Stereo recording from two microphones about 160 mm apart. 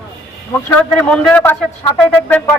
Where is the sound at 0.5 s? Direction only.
10° left (ahead or behind).